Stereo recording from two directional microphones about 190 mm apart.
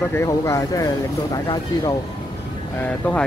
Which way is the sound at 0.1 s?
15° left (ahead or behind).